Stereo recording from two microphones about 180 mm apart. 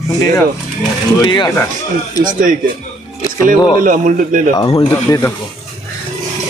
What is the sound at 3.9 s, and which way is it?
Speech, 45° right (ahead or behind).